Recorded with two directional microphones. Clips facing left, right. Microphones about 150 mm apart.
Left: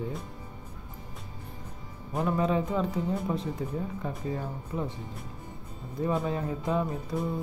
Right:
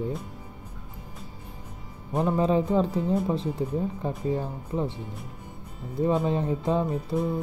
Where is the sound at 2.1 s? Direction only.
30° right (ahead or behind).